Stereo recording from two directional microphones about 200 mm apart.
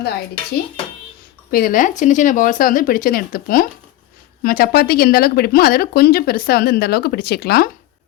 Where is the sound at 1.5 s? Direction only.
45° left (ahead or behind).